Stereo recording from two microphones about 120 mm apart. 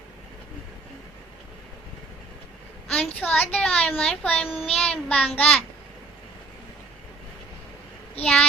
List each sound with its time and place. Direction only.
2.9 s a child's voice: 10° left (ahead or behind)
3.9 s child singing: 10° left (ahead or behind)
8.2 s child singing: 10° left (ahead or behind)